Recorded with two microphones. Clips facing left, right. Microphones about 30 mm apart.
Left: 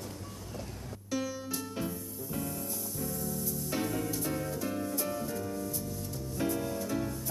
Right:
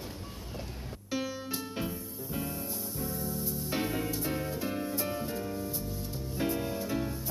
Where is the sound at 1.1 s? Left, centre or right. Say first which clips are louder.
Even; right.